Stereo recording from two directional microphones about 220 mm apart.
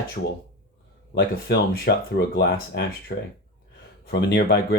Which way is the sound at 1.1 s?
50° left (ahead or behind).